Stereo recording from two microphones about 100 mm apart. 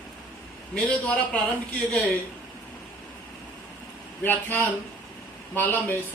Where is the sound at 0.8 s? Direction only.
15° left (ahead or behind).